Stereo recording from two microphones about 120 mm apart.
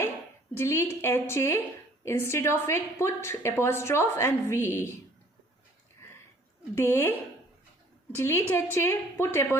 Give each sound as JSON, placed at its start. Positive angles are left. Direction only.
{"t": 0.5, "sound": "a woman's voice", "side_deg": 20}
{"t": 6.7, "sound": "a woman's voice", "side_deg": 20}